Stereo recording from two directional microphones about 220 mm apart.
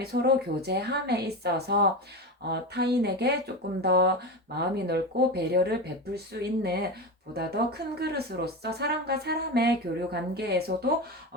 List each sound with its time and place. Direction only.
0.0 s speech: 45° right (ahead or behind)